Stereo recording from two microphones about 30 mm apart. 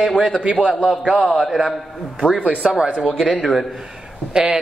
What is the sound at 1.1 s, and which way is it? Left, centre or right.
Speech, right.